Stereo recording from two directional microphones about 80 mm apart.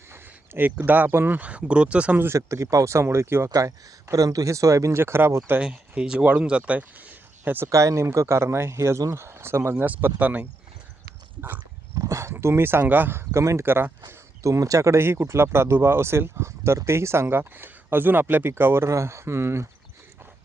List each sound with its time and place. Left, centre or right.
0.1 s speech: right
2.2 s speech: right
3.5 s speech: right
5.5 s speech: centre
7.7 s speech: right; by 10.4 s centre
11.3 s speech: right
11.9 s speech: right
12.3 s speech: right
13.7 s speech: right
14.1 s speech: right